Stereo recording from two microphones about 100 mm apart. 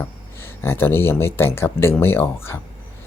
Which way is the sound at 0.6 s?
20° left (ahead or behind).